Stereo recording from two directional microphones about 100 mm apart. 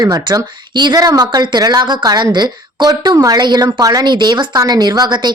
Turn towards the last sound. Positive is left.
turn(degrees=-45)  # may be behind; listen again after turning